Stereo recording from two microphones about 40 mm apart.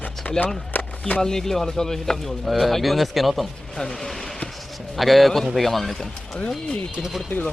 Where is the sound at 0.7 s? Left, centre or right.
Left.